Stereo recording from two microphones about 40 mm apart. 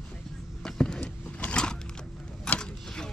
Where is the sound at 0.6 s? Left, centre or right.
Left.